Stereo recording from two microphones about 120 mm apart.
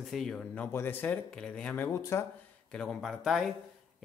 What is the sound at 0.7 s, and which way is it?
Speech, 15° left (ahead or behind).